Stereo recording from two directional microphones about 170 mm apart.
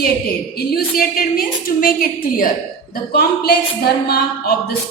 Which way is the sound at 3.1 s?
65° left (ahead or behind).